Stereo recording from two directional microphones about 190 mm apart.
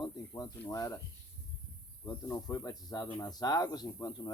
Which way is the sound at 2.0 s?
20° left (ahead or behind).